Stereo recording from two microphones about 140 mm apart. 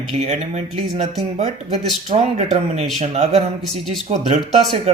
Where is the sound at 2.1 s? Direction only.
50° right (ahead or behind).